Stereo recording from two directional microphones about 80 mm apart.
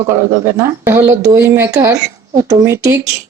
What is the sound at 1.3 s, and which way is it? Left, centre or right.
Speech, right.